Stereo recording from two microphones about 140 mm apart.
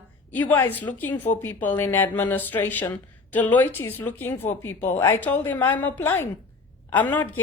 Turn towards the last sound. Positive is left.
turn(degrees=15)  # may be behind; listen again after turning